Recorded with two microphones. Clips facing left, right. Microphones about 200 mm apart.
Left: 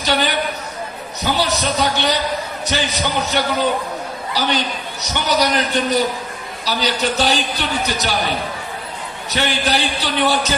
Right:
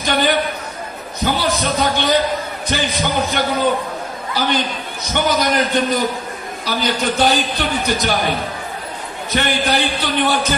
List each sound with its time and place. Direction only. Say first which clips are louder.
0.0 s a man's voice: right 1 dB; 50° right (ahead or behind)
1.2 s a sound: right 1 dB; 50° right (ahead or behind)
4.3 s a man's voice: right 1 dB; 50° right (ahead or behind)
9.3 s a man's voice: right 2 dB; 50° right (ahead or behind)